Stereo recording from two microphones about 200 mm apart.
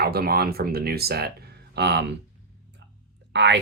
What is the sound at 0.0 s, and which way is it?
Speech, 50° right (ahead or behind).